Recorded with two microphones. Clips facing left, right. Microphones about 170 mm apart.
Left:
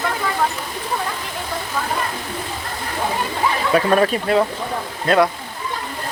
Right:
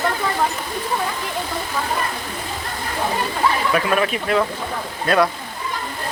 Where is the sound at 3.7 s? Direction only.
35° left (ahead or behind).